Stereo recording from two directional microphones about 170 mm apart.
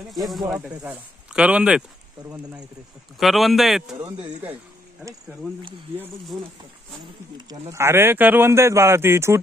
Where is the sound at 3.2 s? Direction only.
Centre (ahead or behind).